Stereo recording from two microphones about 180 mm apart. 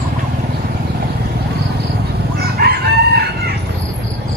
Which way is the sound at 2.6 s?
60° right (ahead or behind).